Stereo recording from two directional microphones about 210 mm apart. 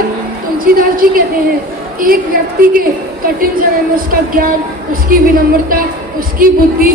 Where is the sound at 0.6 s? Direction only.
45° right (ahead or behind).